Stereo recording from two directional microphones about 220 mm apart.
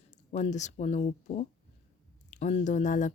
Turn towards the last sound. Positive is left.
turn(degrees=35)  # may be behind; listen again after turning